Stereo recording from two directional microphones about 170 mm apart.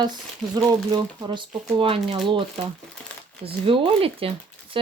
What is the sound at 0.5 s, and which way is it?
Speech, 25° right (ahead or behind).